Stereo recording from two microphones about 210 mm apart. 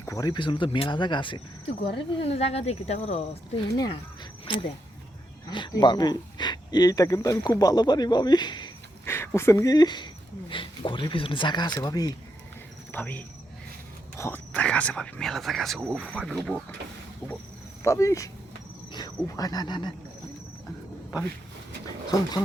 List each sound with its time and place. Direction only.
0.0 s speech: 15° left (ahead or behind)
12.9 s cricket: 10° left (ahead or behind)
14.2 s speech: 10° left (ahead or behind)
17.8 s speech: 15° left (ahead or behind)